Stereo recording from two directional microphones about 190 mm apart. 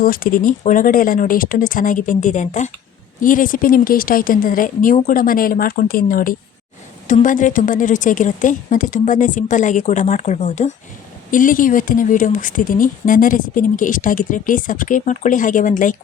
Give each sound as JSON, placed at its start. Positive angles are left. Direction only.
{"t": 0.0, "sound": "speech", "side_deg": 50}